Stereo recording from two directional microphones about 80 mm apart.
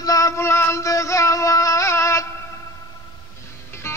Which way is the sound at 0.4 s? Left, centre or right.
Left.